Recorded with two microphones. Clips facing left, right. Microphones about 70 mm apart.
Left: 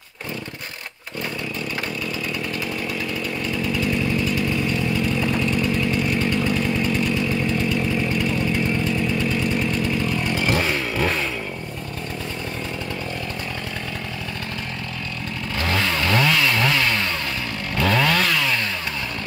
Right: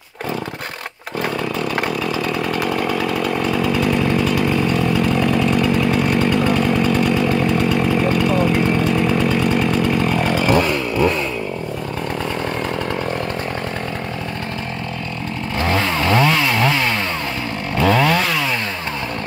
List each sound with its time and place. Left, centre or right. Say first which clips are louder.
2.3 s chainsaw: right 7 dB; right
15.5 s chainsaw: right 4 dB; right